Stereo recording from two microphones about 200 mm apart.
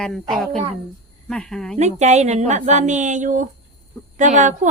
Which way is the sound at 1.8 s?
35° right (ahead or behind).